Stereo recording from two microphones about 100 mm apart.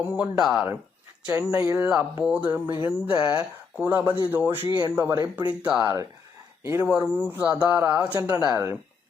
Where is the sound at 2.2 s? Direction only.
10° right (ahead or behind).